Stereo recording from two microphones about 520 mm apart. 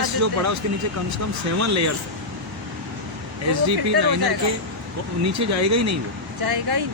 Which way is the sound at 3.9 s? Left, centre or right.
Right.